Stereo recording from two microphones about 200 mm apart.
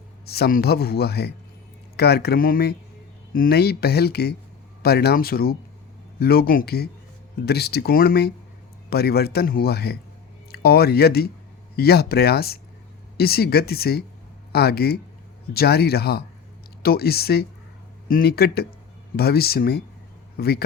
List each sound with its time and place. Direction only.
0.3 s a man's voice: 50° left (ahead or behind)